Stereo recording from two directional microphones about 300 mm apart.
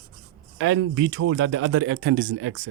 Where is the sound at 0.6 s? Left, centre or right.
Right.